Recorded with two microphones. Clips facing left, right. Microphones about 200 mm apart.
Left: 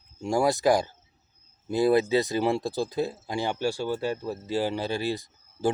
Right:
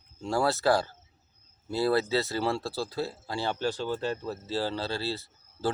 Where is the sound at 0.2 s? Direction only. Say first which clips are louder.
Left 3 dB; 15° left (ahead or behind).